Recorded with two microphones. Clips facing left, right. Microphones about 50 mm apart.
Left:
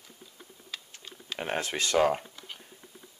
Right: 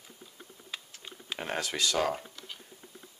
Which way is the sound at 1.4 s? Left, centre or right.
Left.